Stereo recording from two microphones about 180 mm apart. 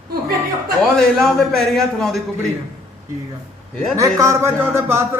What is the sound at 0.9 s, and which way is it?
A man's voice, 5° left (ahead or behind).